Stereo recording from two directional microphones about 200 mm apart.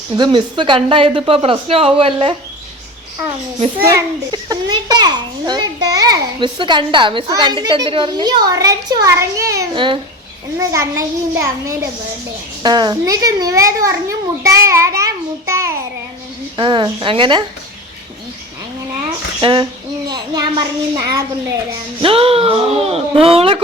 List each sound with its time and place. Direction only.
0.2 s a child's voice: 25° right (ahead or behind)
3.8 s a child's voice: 15° right (ahead or behind)
16.6 s a child's voice: 25° right (ahead or behind)
19.4 s a child's voice: 25° right (ahead or behind)
22.0 s a child's voice: 30° right (ahead or behind)